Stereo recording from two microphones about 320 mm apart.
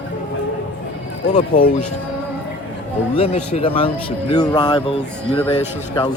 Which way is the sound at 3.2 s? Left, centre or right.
Centre.